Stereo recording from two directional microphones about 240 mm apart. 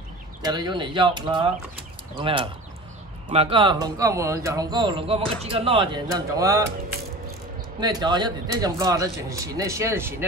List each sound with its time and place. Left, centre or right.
0.4 s speech: centre
7.8 s speech: centre